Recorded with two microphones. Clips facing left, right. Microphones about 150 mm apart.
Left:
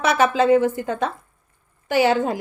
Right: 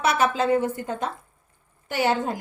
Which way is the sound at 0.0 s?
90° left.